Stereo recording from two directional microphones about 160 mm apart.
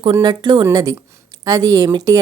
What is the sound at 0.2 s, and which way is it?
A woman's voice, 30° right (ahead or behind).